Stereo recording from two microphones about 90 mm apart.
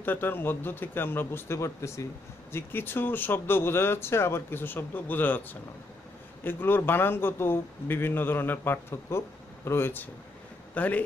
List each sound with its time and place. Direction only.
0.0 s speech: 25° left (ahead or behind)